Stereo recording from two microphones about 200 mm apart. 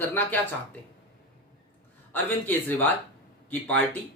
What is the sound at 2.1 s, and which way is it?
Speech, 10° left (ahead or behind).